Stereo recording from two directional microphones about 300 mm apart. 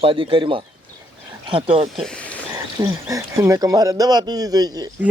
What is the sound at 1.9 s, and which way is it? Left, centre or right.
Speech, centre.